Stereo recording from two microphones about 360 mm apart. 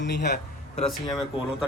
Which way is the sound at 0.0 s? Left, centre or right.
Left.